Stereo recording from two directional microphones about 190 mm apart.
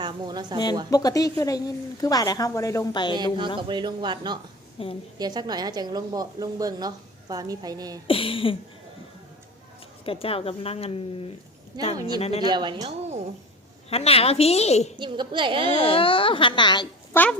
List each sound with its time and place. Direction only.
0.0 s a woman's voice: 25° right (ahead or behind)
0.9 s a woman's voice: 20° left (ahead or behind)
3.6 s a woman's voice: 25° right (ahead or behind)
4.8 s speech: 30° left (ahead or behind)
5.1 s a woman's voice: 20° right (ahead or behind)
8.0 s a woman's voice: 30° left (ahead or behind)
10.1 s speech: 30° left (ahead or behind)
11.9 s a woman's voice: 20° right (ahead or behind)
12.2 s speech: 30° left (ahead or behind)
12.5 s speech: 25° right (ahead or behind)
13.9 s speech: 30° left (ahead or behind)
14.9 s a woman's voice: 25° right (ahead or behind)
15.9 s a woman's voice: 30° left (ahead or behind)
17.1 s speech: 10° left (ahead or behind)